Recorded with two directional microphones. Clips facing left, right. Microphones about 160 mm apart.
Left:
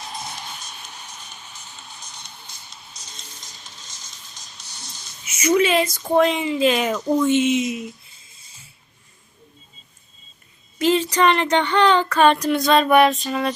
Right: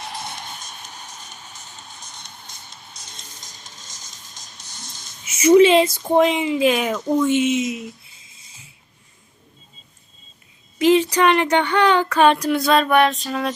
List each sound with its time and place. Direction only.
0.0 s music: 70° right (ahead or behind)
1.0 s music: 45° right (ahead or behind)
3.4 s music: 45° right (ahead or behind)
5.2 s speech: 30° right (ahead or behind); by 7.0 s 10° right (ahead or behind)
7.0 s speech: 10° left (ahead or behind)
7.3 s speech: 5° right (ahead or behind)
10.8 s speech: 15° right (ahead or behind); by 13.5 s centre (ahead or behind)